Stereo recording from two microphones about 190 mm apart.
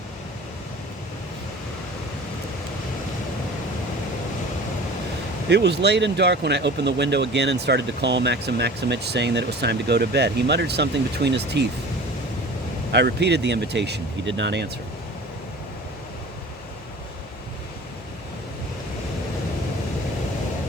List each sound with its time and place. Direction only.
5.5 s speech: 65° right (ahead or behind)
12.9 s speech: 65° right (ahead or behind)